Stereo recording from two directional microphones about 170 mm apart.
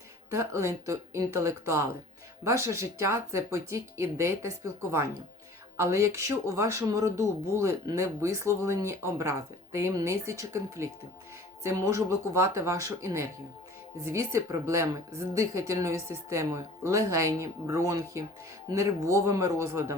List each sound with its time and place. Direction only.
0.3 s a woman's voice: 15° right (ahead or behind)
5.7 s a woman's voice: 15° right (ahead or behind)